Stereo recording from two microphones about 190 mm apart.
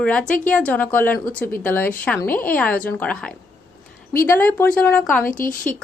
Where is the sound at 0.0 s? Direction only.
5° left (ahead or behind).